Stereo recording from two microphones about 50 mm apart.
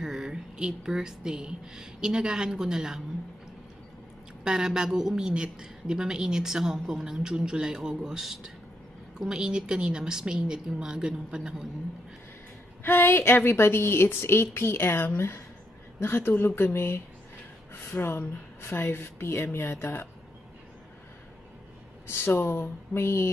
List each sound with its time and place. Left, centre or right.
0.0 s a woman's voice: centre
4.5 s a woman's voice: centre
12.8 s speech: left
22.0 s speech: left